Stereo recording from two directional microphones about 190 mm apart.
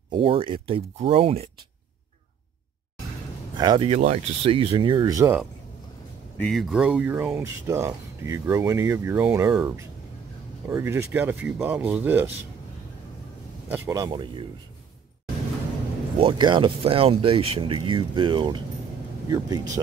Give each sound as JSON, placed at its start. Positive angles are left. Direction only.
{"t": 0.1, "sound": "speech", "side_deg": -30}
{"t": 3.5, "sound": "speech", "side_deg": -25}
{"t": 6.3, "sound": "speech", "side_deg": 0}
{"t": 13.7, "sound": "speech", "side_deg": -15}
{"t": 16.2, "sound": "speech", "side_deg": -25}